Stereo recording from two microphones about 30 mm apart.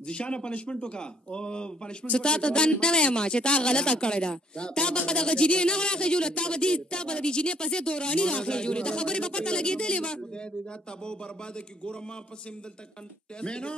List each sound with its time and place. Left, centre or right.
0.0 s speech: left
13.4 s speech: left